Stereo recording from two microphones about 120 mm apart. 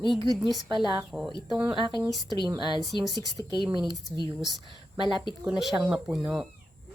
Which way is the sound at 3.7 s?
40° right (ahead or behind).